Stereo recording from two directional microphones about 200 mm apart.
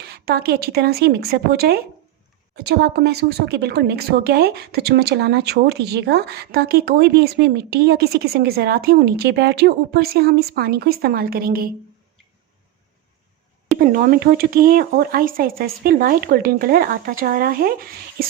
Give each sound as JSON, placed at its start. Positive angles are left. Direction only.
{"t": 0.0, "sound": "a woman's voice", "side_deg": -50}
{"t": 13.7, "sound": "a woman's voice", "side_deg": -45}